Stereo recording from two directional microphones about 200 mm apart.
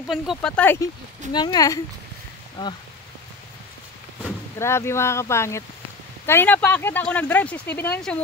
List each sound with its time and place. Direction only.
0.1 s speech: centre (ahead or behind)
1.3 s speech: 20° left (ahead or behind)
4.6 s speech: 15° left (ahead or behind)